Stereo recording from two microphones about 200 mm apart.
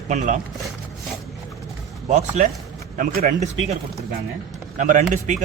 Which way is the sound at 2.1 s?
40° right (ahead or behind).